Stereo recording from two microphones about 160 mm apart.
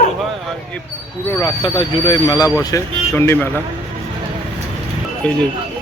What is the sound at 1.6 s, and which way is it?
Speech, 30° left (ahead or behind).